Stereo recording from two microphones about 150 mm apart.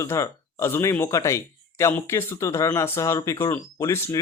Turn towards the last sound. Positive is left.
turn(degrees=15)  # may be behind; listen again after turning